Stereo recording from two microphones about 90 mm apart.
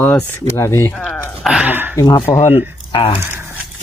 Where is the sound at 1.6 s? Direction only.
20° right (ahead or behind).